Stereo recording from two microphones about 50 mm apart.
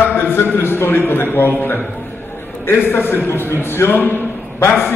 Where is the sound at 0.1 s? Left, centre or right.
Left.